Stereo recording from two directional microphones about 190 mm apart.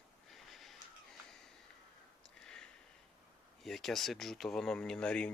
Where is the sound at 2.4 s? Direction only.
5° left (ahead or behind).